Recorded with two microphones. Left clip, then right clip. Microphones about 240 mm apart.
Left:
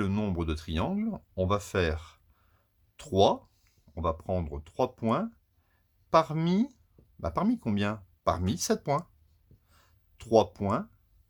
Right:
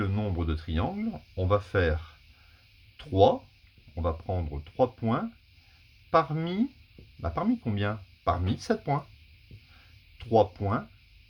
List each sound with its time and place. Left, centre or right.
0.0 s speech: left
10.2 s speech: left